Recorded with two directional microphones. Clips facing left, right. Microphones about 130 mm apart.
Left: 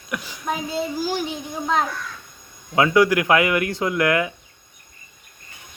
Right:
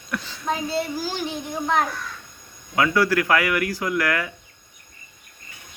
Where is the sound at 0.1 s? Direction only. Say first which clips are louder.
Even; 15° left (ahead or behind).